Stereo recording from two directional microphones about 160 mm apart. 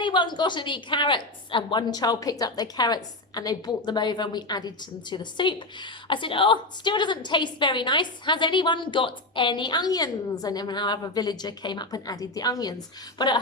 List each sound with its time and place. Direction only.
0.0 s a woman's voice: 30° left (ahead or behind)